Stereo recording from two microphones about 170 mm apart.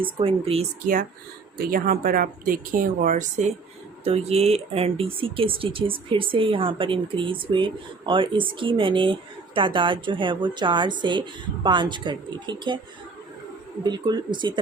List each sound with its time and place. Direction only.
0.0 s speech: 30° right (ahead or behind)
1.5 s a woman's voice: 60° right (ahead or behind); by 12.8 s 25° right (ahead or behind)
13.8 s a woman's voice: 25° right (ahead or behind)